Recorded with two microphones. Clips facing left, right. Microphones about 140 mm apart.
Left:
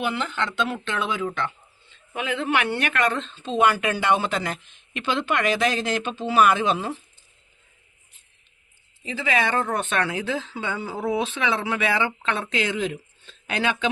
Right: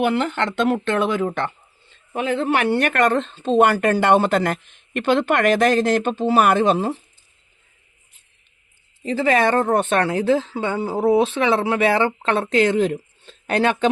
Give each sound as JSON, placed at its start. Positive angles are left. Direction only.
{"t": 0.0, "sound": "speech", "side_deg": -55}
{"t": 9.0, "sound": "speech", "side_deg": -45}